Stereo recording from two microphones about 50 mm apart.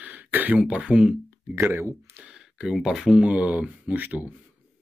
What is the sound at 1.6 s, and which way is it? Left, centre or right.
Speech, right.